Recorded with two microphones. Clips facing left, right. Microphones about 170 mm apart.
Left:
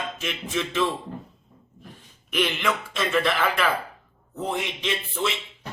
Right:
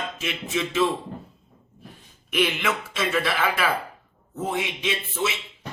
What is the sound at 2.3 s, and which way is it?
Speech, 5° right (ahead or behind).